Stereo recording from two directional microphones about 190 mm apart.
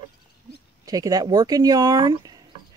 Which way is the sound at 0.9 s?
20° right (ahead or behind).